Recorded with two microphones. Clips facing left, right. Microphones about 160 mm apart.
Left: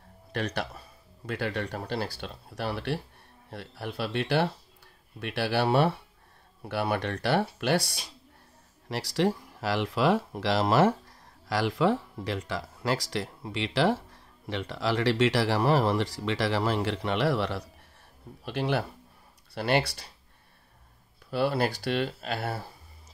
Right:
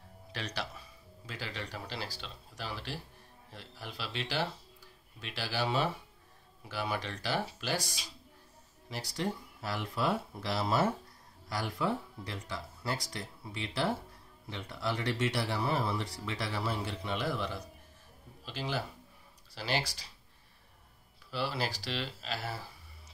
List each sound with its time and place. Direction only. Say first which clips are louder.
0.3 s speech: left 8 dB; 55° left (ahead or behind)
8.8 s speech: left 9 dB; 75° left (ahead or behind)
18.4 s speech: left 8 dB; 60° left (ahead or behind)
21.3 s speech: left 9 dB; 55° left (ahead or behind)